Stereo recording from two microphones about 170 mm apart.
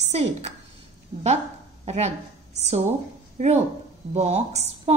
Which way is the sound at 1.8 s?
40° right (ahead or behind).